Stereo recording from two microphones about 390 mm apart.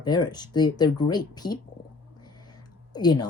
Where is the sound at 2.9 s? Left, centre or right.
Centre.